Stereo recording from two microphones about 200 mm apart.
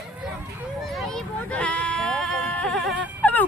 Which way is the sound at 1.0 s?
Centre (ahead or behind).